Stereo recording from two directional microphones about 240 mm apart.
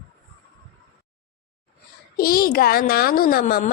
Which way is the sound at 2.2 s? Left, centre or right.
Left.